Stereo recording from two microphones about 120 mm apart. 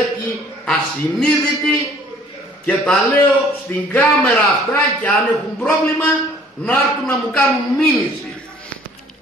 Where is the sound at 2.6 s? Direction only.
10° left (ahead or behind).